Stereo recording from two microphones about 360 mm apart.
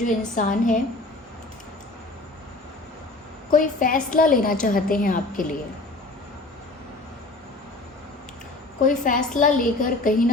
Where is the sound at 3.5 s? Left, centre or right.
Left.